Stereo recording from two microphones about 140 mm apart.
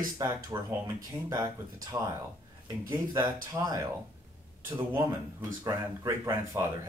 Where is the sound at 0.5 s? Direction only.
20° right (ahead or behind).